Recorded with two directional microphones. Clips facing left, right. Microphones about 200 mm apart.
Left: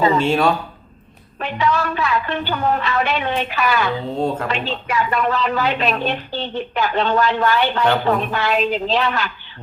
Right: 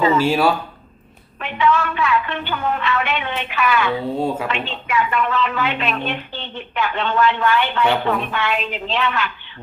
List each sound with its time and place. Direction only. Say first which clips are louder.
0.0 s a woman's voice: even; 35° left (ahead or behind)
0.3 s speech: even; 5° right (ahead or behind)
1.4 s a woman's voice: right 1 dB; 40° left (ahead or behind)